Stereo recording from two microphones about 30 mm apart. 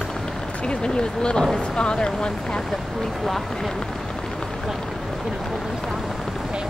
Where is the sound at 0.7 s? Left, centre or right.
Left.